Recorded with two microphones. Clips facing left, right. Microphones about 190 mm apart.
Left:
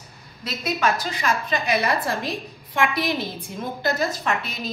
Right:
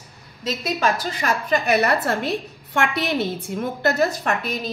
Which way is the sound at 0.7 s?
40° right (ahead or behind).